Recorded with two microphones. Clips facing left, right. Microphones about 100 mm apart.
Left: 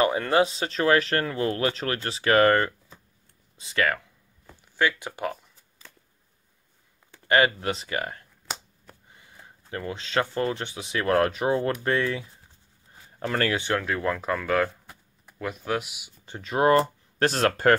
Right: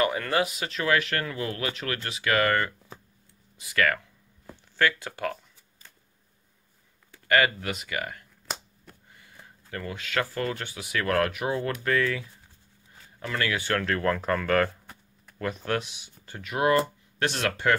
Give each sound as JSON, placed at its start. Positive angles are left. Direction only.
{"t": 0.0, "sound": "speech", "side_deg": 25}
{"t": 7.1, "sound": "speech", "side_deg": 25}
{"t": 13.2, "sound": "speech", "side_deg": 40}
{"t": 13.6, "sound": "speech", "side_deg": 15}
{"t": 14.9, "sound": "a sound", "side_deg": 5}
{"t": 16.3, "sound": "speech", "side_deg": 25}